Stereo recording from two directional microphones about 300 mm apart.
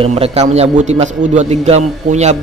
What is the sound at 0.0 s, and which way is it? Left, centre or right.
A man's voice, centre.